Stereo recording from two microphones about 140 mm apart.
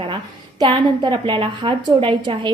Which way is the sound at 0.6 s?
35° right (ahead or behind).